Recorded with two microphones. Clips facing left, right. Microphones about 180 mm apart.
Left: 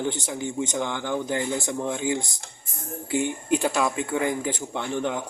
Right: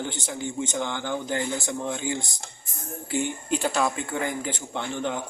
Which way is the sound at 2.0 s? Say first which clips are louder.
Left 4 dB; 20° left (ahead or behind).